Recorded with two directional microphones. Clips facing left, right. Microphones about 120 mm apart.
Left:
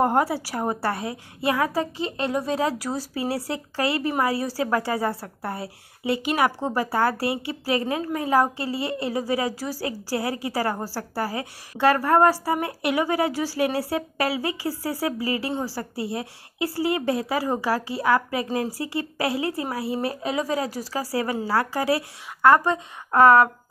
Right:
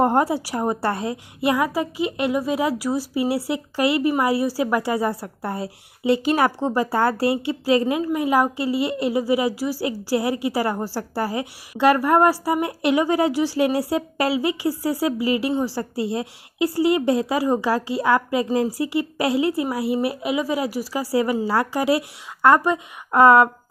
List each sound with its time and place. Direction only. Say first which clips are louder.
0.0 s a woman's voice: right 3 dB; 20° right (ahead or behind)
6.6 s a woman's voice: right 3 dB; 20° right (ahead or behind)